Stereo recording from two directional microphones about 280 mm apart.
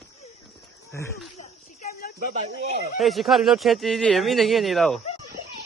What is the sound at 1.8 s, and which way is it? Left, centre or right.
Snake, left.